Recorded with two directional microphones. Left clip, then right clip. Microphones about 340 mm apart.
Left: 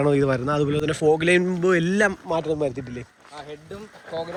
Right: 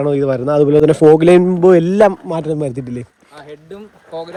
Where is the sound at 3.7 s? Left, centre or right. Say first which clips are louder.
Right 3 dB; right.